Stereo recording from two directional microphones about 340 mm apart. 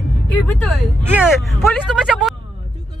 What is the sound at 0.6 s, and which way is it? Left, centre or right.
Speech, centre.